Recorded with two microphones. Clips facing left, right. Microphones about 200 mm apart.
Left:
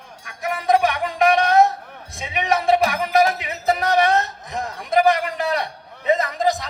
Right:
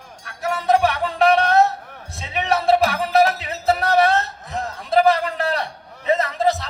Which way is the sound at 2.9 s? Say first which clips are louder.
Right 1 dB; 15° left (ahead or behind).